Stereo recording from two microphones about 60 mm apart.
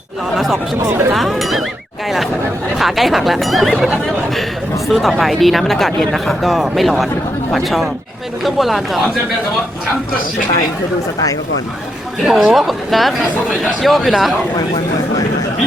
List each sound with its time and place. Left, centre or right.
0.3 s speech: centre
0.9 s speech: right
1.1 s speech: centre
2.7 s speech: centre
12.2 s speech: centre